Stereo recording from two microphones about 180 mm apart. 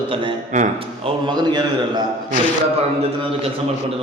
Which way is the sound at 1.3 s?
25° right (ahead or behind).